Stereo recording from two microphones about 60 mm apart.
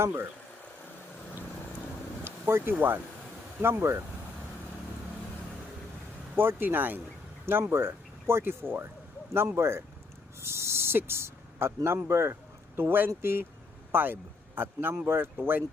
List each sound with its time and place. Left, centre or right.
0.0 s speech: right
2.8 s speech: right
6.3 s speech: right
7.6 s speech: right